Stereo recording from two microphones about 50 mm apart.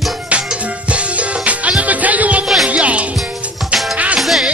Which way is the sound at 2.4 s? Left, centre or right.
Centre.